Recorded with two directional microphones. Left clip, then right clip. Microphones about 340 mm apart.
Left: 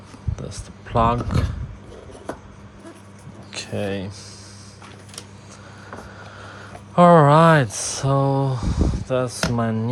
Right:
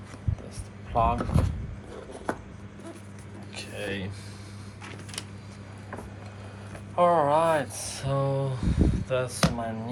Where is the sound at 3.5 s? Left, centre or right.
Centre.